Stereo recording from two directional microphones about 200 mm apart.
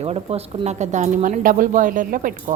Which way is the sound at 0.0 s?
30° right (ahead or behind).